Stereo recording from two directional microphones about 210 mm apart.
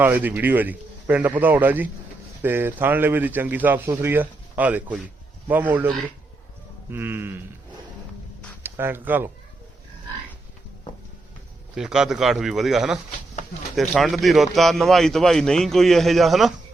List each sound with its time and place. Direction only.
0.0 s a man's voice: 10° right (ahead or behind)
6.9 s a man's voice: 10° right (ahead or behind)
8.6 s speech: 10° right (ahead or behind)
11.7 s a man's voice: 5° right (ahead or behind)